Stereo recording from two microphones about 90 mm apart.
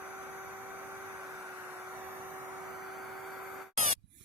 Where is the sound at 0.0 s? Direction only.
20° right (ahead or behind).